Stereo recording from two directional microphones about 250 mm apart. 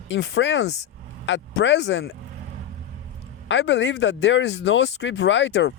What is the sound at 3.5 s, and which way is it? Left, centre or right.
Speech, left.